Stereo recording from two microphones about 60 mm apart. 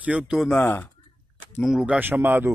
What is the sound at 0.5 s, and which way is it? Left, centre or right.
Speech, left.